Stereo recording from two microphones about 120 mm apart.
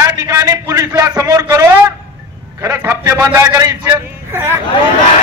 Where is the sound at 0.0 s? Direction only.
25° right (ahead or behind).